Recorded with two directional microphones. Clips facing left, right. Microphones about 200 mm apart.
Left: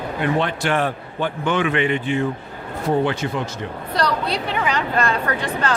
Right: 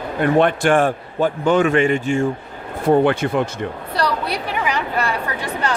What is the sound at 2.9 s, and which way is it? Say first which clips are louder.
Speech: right 5 dB; 55° right (ahead or behind).